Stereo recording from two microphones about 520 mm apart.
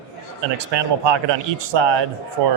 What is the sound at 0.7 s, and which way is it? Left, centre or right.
Speech, right.